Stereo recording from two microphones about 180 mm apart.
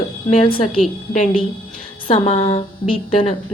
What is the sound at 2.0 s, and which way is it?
Speech, 35° left (ahead or behind).